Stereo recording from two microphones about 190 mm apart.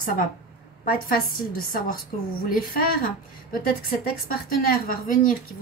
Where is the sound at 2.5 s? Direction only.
50° left (ahead or behind).